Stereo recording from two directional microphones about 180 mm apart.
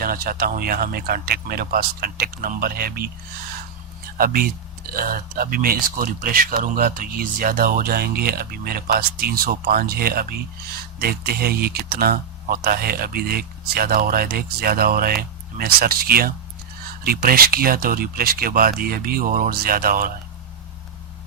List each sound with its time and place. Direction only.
0.0 s speech: 55° right (ahead or behind)
4.2 s speech: 55° right (ahead or behind)